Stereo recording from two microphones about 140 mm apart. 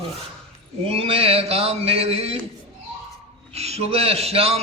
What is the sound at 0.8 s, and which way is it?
A man's voice, 45° right (ahead or behind).